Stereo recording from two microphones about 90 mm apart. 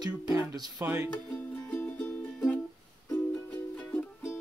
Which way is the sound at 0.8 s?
25° right (ahead or behind).